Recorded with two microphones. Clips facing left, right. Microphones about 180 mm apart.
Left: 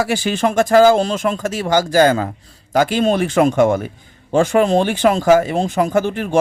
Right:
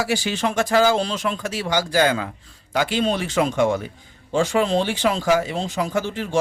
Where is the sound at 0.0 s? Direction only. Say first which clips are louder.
Left 5 dB; 55° left (ahead or behind).